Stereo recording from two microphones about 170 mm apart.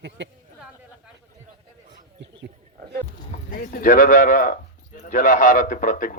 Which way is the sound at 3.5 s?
55° left (ahead or behind).